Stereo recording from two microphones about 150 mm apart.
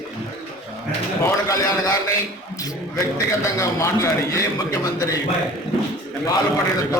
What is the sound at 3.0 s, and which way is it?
A man's voice, 20° left (ahead or behind).